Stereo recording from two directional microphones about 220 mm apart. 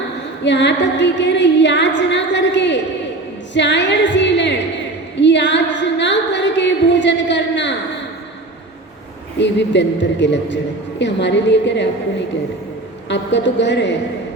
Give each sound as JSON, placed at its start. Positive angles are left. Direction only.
{"t": 0.4, "sound": "singing", "side_deg": 55}
{"t": 9.4, "sound": "singing", "side_deg": 55}
{"t": 13.1, "sound": "singing", "side_deg": 55}